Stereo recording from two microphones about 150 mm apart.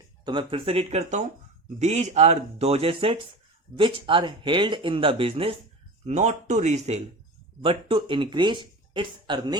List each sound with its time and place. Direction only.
0.3 s speech: 35° right (ahead or behind)
6.1 s speech: 50° right (ahead or behind)
7.6 s speech: 35° right (ahead or behind)